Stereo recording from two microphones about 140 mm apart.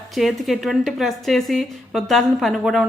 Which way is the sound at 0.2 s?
Centre (ahead or behind).